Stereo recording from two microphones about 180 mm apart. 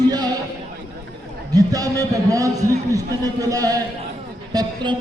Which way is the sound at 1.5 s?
20° right (ahead or behind).